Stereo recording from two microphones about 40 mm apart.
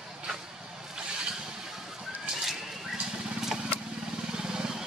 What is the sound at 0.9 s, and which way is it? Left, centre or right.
Vehicle, right.